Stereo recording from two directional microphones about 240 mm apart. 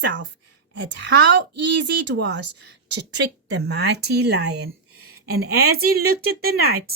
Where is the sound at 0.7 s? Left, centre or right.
Right.